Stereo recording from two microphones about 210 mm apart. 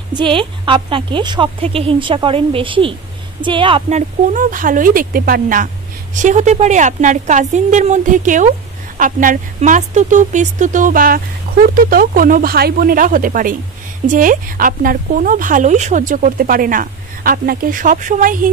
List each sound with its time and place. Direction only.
0.1 s a woman's voice: 25° right (ahead or behind); by 18.5 s 40° right (ahead or behind)